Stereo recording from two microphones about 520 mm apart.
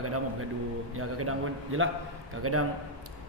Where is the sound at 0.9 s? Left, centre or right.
Right.